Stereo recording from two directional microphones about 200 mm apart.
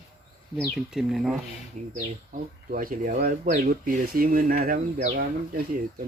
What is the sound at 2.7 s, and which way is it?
Speech, 45° right (ahead or behind).